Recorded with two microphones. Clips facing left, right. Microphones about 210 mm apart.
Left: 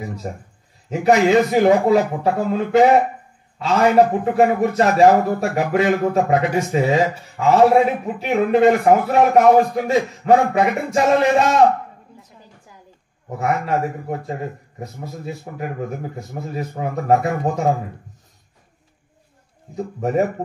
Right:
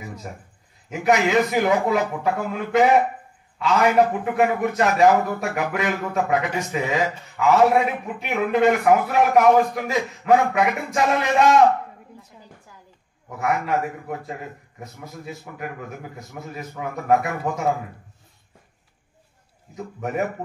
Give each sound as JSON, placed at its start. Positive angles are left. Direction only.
{"t": 0.2, "sound": "a man's voice", "side_deg": 35}
{"t": 13.3, "sound": "a man's voice", "side_deg": 30}
{"t": 19.7, "sound": "a man's voice", "side_deg": 30}